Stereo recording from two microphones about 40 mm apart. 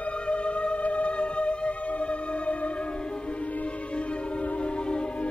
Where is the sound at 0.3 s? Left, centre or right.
Left.